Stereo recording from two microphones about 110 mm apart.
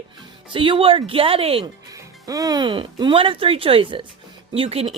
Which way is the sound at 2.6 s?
50° right (ahead or behind).